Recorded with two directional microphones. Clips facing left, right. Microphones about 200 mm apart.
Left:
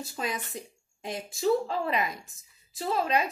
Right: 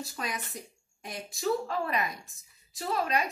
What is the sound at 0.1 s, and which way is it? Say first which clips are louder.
Speech: left 3 dB; 25° left (ahead or behind).